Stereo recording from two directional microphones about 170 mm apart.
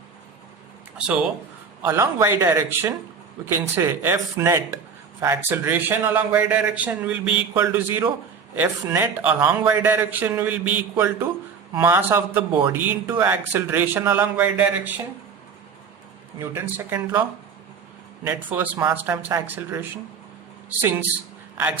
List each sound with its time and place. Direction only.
1.8 s speech: 15° right (ahead or behind)
16.5 s speech: 15° right (ahead or behind)